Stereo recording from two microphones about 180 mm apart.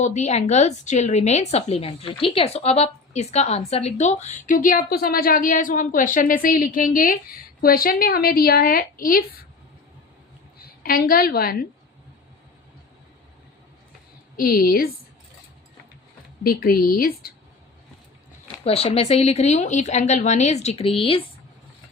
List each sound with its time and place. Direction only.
0.0 s a woman's voice: 40° left (ahead or behind)
10.8 s a woman's voice: 55° left (ahead or behind)
14.3 s a woman's voice: 55° left (ahead or behind)
16.4 s a woman's voice: 55° left (ahead or behind)
18.6 s a woman's voice: 35° left (ahead or behind)